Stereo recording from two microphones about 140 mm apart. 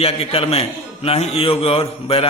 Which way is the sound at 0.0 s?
45° left (ahead or behind).